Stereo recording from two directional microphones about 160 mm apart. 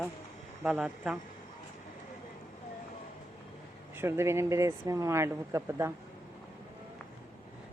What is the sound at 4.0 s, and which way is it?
Speech, 15° right (ahead or behind).